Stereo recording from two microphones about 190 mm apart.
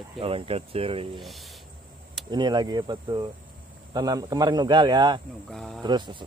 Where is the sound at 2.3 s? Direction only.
25° right (ahead or behind).